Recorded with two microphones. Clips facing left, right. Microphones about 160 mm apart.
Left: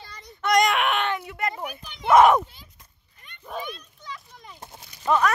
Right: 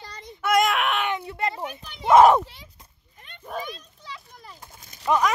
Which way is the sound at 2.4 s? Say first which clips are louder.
Right 2 dB; 75° right (ahead or behind).